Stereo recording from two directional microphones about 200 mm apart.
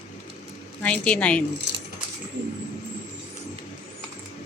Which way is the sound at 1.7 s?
60° right (ahead or behind).